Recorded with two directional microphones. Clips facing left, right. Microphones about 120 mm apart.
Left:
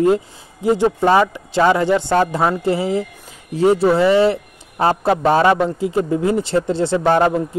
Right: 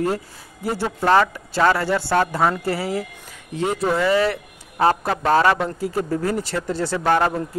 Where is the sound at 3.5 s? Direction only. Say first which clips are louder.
Left 8 dB; 35° left (ahead or behind).